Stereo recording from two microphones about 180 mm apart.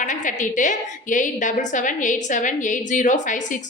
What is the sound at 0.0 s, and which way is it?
A woman's voice, 45° left (ahead or behind).